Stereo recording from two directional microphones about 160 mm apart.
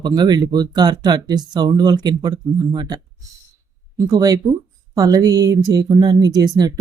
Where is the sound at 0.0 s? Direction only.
25° right (ahead or behind).